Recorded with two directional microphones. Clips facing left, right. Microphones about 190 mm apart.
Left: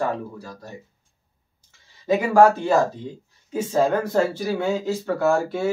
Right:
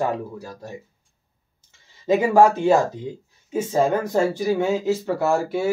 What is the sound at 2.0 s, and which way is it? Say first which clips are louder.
Speech: even; 20° right (ahead or behind).